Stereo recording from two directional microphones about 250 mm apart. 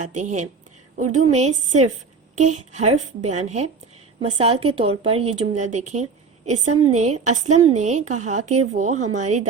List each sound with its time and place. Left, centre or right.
0.1 s a woman's voice: right
1.0 s a woman's voice: right
1.3 s a woman's voice: right